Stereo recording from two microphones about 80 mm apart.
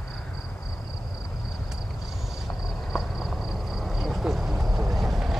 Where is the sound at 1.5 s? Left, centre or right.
Centre.